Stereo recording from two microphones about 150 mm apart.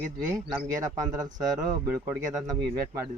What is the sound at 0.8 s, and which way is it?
Speech, 25° right (ahead or behind).